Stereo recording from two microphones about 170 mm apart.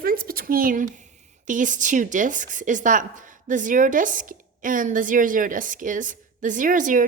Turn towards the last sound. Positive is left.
turn(degrees=-50)  # may be behind; listen again after turning